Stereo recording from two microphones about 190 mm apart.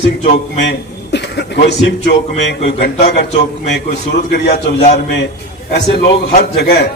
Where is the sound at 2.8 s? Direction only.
40° left (ahead or behind).